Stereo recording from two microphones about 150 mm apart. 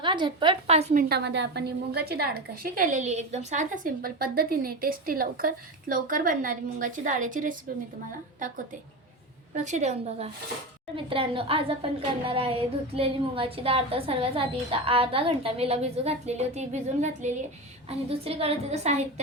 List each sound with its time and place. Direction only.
0.0 s a woman's voice: 30° right (ahead or behind)
1.0 s a woman's voice: 90° right; by 3.9 s 55° right (ahead or behind)
4.0 s a woman's voice: 85° right; by 7.5 s 60° right (ahead or behind)
9.6 s a woman's voice: 50° right (ahead or behind)
17.8 s a woman's voice: 40° right (ahead or behind)